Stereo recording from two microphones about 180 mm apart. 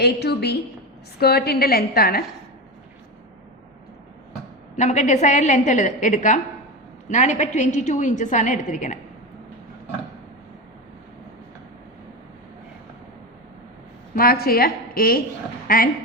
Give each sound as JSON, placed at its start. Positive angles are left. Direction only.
{"t": 0.0, "sound": "a woman's voice", "side_deg": 65}
{"t": 4.8, "sound": "a woman's voice", "side_deg": 40}
{"t": 14.2, "sound": "a woman's voice", "side_deg": 55}